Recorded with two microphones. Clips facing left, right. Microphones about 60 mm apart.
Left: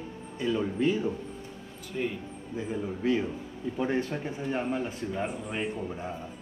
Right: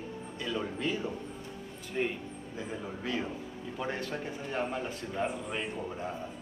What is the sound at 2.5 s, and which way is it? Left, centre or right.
Speech, left.